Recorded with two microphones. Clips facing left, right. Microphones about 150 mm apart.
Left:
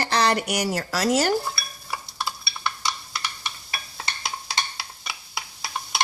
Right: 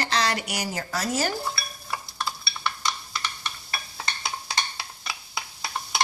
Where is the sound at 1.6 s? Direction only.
5° left (ahead or behind).